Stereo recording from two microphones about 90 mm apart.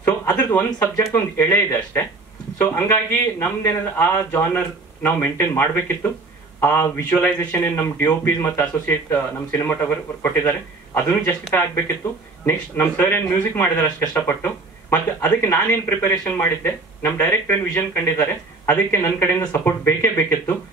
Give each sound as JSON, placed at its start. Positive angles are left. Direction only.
{"t": 0.0, "sound": "a sound", "side_deg": 20}
{"t": 1.1, "sound": "speech", "side_deg": 20}
{"t": 12.4, "sound": "speech", "side_deg": 25}